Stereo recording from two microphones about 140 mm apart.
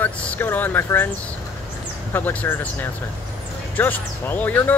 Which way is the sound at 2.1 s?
10° left (ahead or behind).